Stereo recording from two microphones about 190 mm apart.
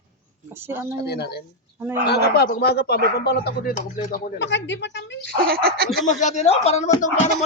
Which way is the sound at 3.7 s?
40° left (ahead or behind).